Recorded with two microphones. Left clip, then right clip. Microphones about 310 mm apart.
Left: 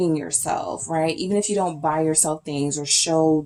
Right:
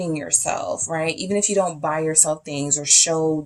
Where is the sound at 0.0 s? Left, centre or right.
Right.